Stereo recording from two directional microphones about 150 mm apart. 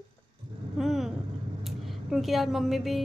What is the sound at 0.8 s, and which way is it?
Vehicle, centre (ahead or behind).